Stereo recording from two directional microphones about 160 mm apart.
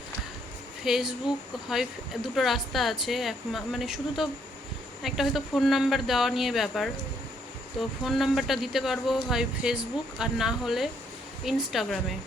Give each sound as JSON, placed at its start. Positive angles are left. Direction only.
{"t": 0.9, "sound": "speech", "side_deg": 0}